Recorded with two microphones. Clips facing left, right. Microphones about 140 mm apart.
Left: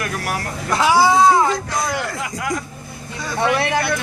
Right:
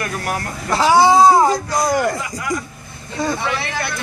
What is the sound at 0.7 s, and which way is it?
Speech, 25° right (ahead or behind).